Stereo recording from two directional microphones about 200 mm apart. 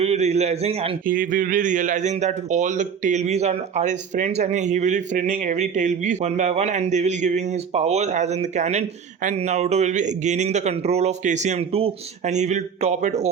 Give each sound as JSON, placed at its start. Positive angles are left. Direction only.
{"t": 0.0, "sound": "speech", "side_deg": -35}
{"t": 1.0, "sound": "speech", "side_deg": -45}